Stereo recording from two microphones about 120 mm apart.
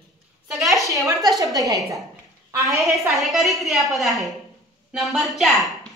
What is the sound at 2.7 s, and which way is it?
A woman's voice, centre (ahead or behind).